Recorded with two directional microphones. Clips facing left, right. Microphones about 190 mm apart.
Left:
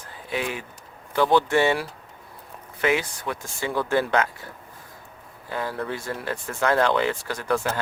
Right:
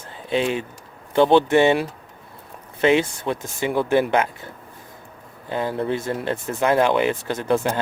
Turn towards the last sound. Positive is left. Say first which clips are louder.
# right 4 dB
turn(degrees=-20)  # may be behind; listen again after turning